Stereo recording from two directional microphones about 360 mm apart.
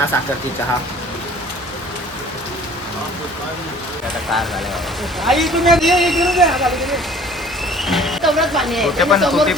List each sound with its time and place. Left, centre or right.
5.2 s speech: centre